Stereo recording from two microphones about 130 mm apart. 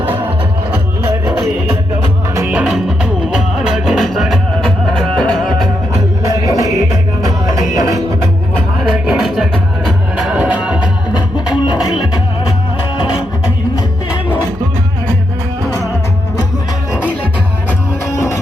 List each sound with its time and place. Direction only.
2.5 s music: 5° right (ahead or behind)
6.2 s music: 25° right (ahead or behind)
8.8 s music: centre (ahead or behind)
18.1 s music: 20° left (ahead or behind)